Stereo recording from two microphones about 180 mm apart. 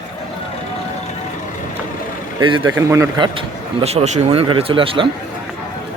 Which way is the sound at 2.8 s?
15° right (ahead or behind).